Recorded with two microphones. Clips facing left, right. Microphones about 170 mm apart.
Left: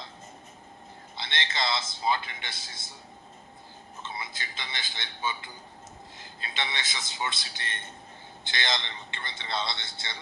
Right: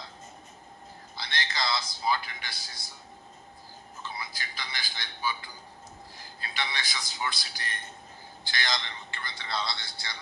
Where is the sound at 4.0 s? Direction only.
25° left (ahead or behind).